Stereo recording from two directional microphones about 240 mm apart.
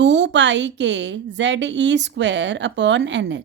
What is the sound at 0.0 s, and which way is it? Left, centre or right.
A woman's voice, right.